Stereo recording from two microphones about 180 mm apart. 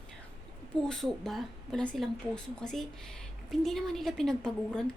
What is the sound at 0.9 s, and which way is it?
A woman's voice, centre (ahead or behind).